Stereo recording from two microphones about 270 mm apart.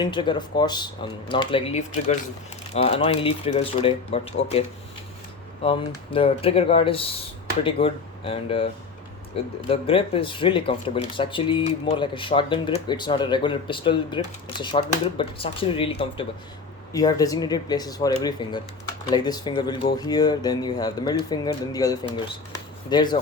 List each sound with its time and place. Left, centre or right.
0.0 s speech: centre
5.6 s speech: centre